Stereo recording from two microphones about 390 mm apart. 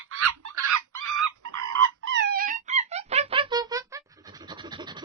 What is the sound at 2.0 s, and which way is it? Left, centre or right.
Wail, right.